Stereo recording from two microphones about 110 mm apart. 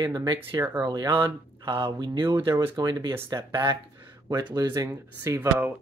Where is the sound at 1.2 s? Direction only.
25° right (ahead or behind).